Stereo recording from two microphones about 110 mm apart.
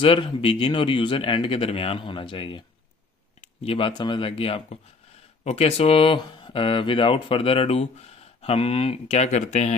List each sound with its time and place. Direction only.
0.0 s speech: 50° left (ahead or behind); by 9.8 s 90° left